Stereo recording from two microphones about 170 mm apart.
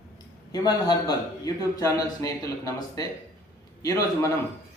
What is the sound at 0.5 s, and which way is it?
A man's voice, 25° left (ahead or behind).